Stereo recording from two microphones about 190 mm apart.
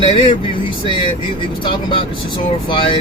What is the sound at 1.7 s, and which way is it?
Speech, 25° left (ahead or behind).